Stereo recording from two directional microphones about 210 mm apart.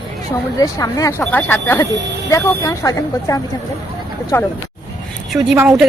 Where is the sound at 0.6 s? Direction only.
15° left (ahead or behind).